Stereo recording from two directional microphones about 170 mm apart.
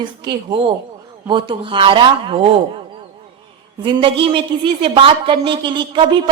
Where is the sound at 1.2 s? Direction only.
30° right (ahead or behind).